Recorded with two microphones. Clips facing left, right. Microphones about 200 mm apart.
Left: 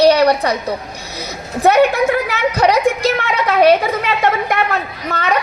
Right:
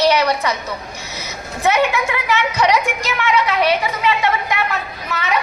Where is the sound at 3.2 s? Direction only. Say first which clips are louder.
Left 2 dB; 50° left (ahead or behind).